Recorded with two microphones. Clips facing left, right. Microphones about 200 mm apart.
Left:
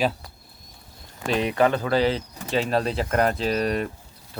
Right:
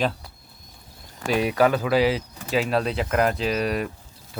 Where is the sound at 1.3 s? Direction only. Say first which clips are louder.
Right 1 dB; 5° right (ahead or behind).